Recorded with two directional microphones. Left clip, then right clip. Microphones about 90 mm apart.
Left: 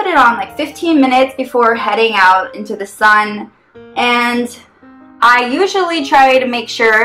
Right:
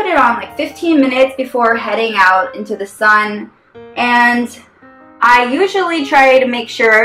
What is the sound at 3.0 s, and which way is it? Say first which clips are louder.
Speech: left 1 dB; 50° left (ahead or behind).